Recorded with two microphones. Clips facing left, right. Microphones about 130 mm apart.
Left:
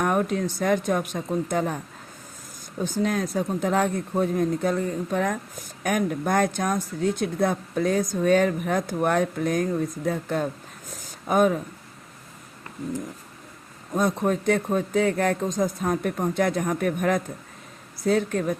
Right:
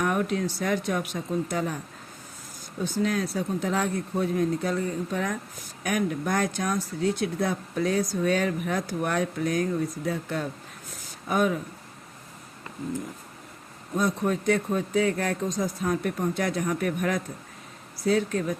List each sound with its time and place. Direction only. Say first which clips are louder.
0.0 s speech: left 2 dB; 45° left (ahead or behind)
2.8 s speech: left 1 dB; 45° left (ahead or behind)
13.9 s speech: left 3 dB; 50° left (ahead or behind)